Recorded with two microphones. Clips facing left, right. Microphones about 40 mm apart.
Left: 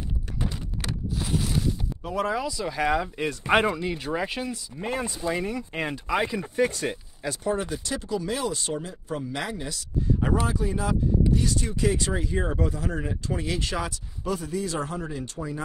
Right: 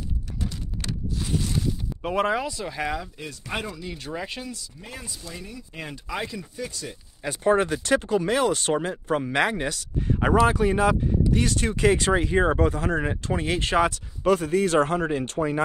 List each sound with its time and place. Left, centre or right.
0.8 s a sound: centre
2.0 s speech: right
2.5 s speech: centre
3.2 s speech: left
4.0 s speech: centre
4.8 s speech: left
5.3 s speech: left
5.8 s speech: left
6.5 s speech: left
7.4 s speech: right